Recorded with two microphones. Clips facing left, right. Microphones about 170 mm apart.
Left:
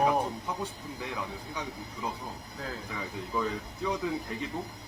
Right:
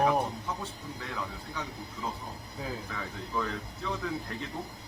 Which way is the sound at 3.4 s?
15° left (ahead or behind).